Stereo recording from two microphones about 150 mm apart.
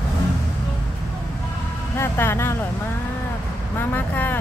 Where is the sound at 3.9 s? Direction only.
10° left (ahead or behind).